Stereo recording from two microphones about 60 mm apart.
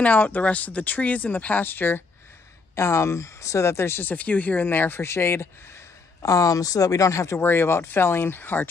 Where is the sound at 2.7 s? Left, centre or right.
Left.